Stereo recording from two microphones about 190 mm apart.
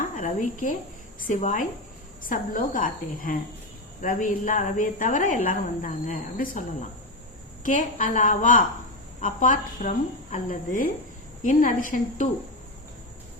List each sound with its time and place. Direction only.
0.2 s a woman's voice: 40° left (ahead or behind)